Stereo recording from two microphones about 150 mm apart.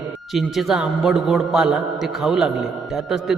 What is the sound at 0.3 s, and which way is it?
A man's voice, centre (ahead or behind).